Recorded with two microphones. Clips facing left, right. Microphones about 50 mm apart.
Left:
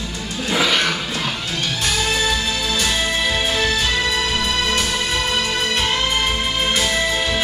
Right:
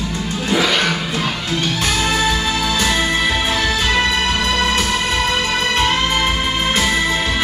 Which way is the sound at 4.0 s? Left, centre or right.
Right.